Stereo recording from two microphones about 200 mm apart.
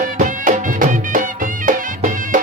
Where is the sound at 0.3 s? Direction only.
40° right (ahead or behind).